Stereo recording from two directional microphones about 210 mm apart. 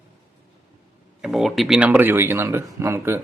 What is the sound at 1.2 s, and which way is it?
Speech, centre (ahead or behind).